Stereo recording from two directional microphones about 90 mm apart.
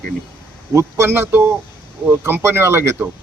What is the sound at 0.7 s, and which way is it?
Speech, 35° right (ahead or behind).